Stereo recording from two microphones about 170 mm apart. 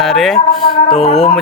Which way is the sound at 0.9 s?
40° left (ahead or behind).